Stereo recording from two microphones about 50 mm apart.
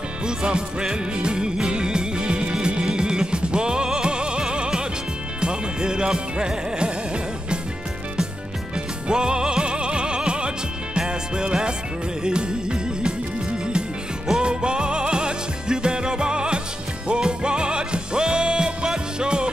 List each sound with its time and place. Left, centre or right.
0.4 s music: centre
9.0 s music: centre